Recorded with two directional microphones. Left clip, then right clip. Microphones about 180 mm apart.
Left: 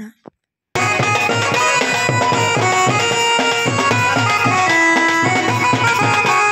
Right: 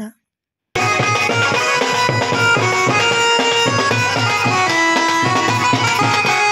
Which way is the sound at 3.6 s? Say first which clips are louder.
Even; 35° left (ahead or behind).